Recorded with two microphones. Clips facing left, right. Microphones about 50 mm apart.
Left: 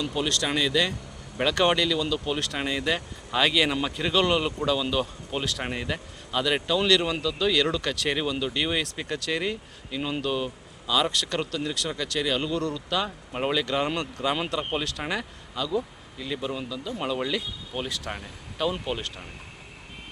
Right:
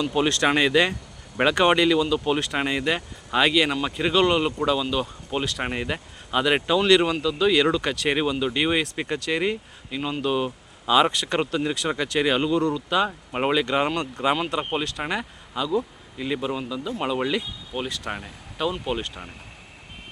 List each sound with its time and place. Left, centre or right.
0.0 s speech: right
3.5 s speech: centre
10.8 s speech: right
11.1 s speech: centre
12.5 s speech: centre
13.1 s speech: right
17.7 s speech: centre